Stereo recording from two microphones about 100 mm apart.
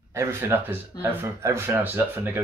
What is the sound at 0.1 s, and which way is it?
Speech, 25° right (ahead or behind).